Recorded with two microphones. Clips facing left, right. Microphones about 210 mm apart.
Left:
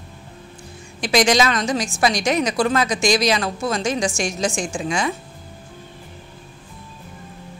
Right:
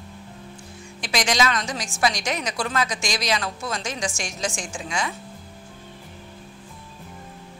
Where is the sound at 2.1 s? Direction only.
55° left (ahead or behind).